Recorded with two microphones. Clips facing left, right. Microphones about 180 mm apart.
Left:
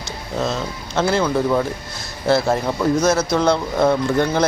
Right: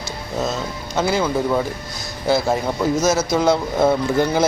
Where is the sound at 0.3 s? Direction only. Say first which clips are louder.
Left 1 dB; 5° right (ahead or behind).